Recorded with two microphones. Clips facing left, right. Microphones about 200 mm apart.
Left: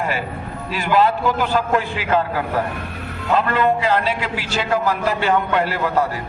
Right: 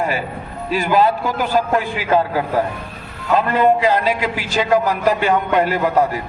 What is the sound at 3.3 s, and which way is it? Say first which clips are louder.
A man's voice: right 3 dB; 15° right (ahead or behind).